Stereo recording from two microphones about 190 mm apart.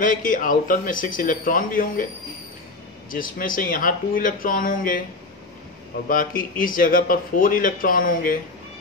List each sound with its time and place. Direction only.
0.0 s a man's voice: 45° left (ahead or behind)
3.1 s a man's voice: 45° left (ahead or behind)
6.0 s a man's voice: 45° left (ahead or behind)